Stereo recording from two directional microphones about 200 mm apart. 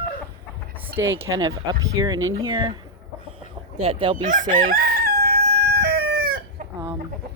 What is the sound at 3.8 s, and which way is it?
Speech, 25° right (ahead or behind).